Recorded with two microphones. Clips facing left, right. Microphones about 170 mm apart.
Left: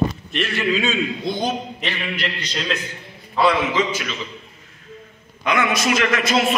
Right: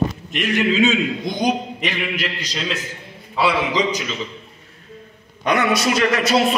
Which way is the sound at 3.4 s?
10° right (ahead or behind).